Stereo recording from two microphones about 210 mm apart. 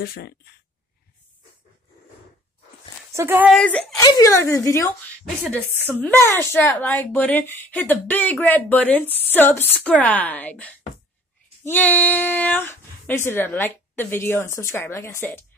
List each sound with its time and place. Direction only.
0.0 s speech: 45° left (ahead or behind)
3.1 s speech: 10° right (ahead or behind)
3.6 s a woman's voice: 5° left (ahead or behind)